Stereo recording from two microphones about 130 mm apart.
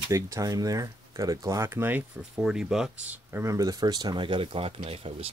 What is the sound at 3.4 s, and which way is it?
Speech, 25° right (ahead or behind).